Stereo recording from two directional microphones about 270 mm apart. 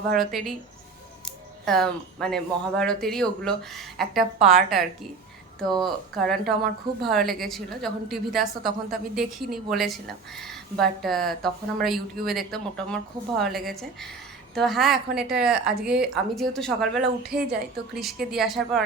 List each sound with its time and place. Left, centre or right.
0.1 s speech: centre
1.6 s speech: centre